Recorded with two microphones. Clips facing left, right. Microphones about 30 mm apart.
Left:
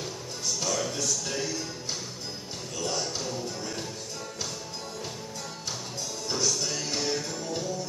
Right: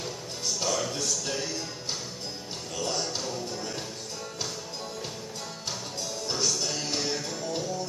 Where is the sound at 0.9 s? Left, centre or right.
Centre.